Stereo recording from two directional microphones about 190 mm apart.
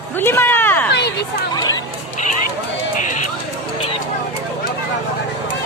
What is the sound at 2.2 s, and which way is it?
Run, 40° left (ahead or behind).